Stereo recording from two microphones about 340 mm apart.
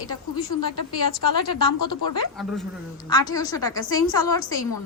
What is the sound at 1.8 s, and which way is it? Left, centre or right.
Speech, left.